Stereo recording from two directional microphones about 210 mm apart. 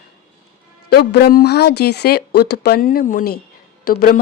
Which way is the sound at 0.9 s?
50° left (ahead or behind).